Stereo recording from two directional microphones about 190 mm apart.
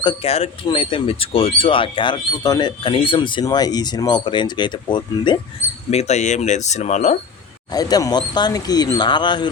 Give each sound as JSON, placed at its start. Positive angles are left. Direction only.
{"t": 0.0, "sound": "speech", "side_deg": 25}
{"t": 0.3, "sound": "speech", "side_deg": 35}
{"t": 5.9, "sound": "speech", "side_deg": 35}
{"t": 7.7, "sound": "speech", "side_deg": 20}